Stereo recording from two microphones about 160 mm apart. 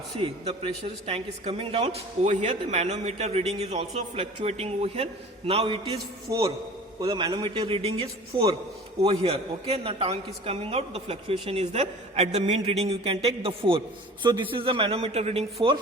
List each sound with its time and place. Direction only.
0.2 s a woman's voice: 35° right (ahead or behind)
6.3 s a man's voice: 25° right (ahead or behind); by 15.7 s 40° right (ahead or behind)